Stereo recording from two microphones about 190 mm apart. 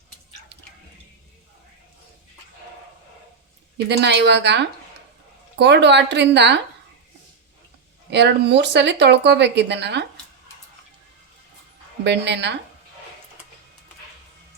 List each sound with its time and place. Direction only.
3.8 s speech: 65° right (ahead or behind)
8.1 s speech: 65° right (ahead or behind)
12.0 s speech: 65° right (ahead or behind)